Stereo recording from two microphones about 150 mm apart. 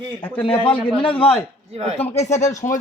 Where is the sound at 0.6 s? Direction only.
35° left (ahead or behind).